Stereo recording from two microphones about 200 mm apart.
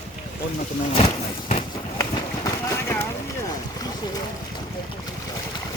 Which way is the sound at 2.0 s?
15° left (ahead or behind).